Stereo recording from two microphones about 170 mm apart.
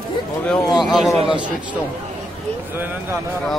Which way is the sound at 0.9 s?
Centre (ahead or behind).